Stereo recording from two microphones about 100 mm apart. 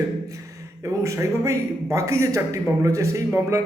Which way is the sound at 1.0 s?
30° right (ahead or behind).